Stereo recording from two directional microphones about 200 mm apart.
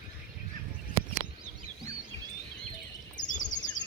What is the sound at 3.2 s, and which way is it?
Chirp, 40° left (ahead or behind).